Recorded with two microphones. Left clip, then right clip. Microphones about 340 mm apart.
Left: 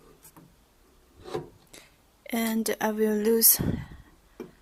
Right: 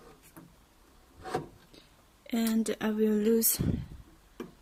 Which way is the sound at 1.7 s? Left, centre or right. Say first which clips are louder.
Left 5 dB; centre.